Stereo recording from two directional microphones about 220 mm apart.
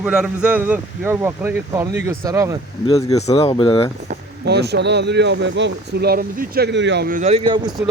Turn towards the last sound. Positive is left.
turn(degrees=-20)  # may be behind; listen again after turning